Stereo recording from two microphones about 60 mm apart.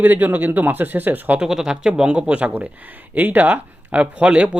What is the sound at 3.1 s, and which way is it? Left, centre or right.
Speech, right.